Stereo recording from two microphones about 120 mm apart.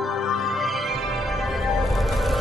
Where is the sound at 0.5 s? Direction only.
Centre (ahead or behind).